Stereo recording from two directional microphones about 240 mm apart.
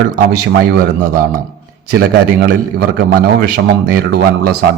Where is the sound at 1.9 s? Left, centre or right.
Right.